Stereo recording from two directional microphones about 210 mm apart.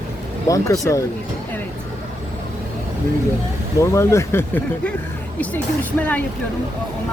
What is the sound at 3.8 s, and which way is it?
Speech, 15° left (ahead or behind).